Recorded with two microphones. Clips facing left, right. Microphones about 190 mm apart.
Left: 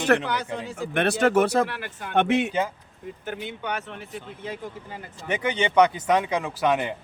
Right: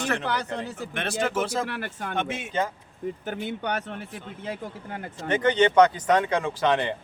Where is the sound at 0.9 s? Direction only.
65° left (ahead or behind).